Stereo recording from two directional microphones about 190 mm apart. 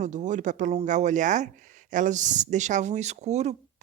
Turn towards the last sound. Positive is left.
turn(degrees=-35)  # may be behind; listen again after turning